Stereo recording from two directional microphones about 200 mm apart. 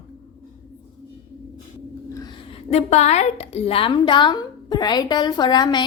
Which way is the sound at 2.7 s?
35° left (ahead or behind).